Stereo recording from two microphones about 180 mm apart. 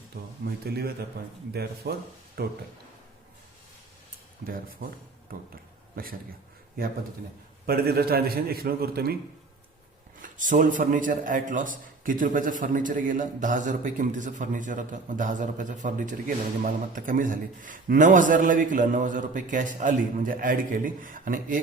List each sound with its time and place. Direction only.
0.1 s a man's voice: 75° right (ahead or behind)
0.6 s a man's voice: 60° right (ahead or behind)
7.7 s a man's voice: 60° right (ahead or behind)
10.2 s a man's voice: 45° right (ahead or behind)